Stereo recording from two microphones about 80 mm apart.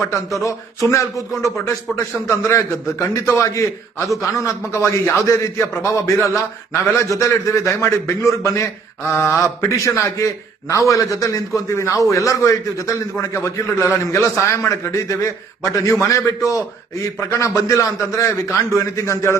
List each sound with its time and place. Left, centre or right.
0.4 s a man's voice: left